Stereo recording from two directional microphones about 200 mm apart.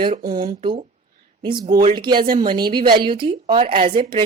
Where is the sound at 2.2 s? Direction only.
45° right (ahead or behind).